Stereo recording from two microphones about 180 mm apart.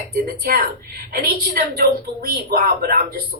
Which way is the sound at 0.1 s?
55° right (ahead or behind).